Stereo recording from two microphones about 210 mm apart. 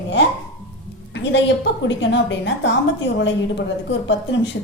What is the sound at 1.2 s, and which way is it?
A woman's voice, 55° left (ahead or behind).